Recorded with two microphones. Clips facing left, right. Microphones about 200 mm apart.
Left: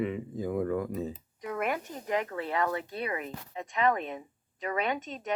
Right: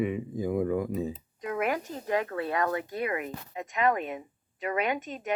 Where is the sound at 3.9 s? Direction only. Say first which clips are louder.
Right 2 dB; 10° right (ahead or behind).